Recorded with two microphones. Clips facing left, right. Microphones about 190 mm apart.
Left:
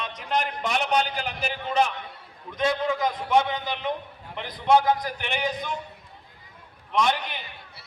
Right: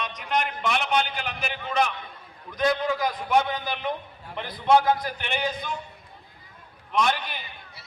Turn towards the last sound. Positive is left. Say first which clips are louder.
# left 1 dB
turn(degrees=20)  # may be behind; listen again after turning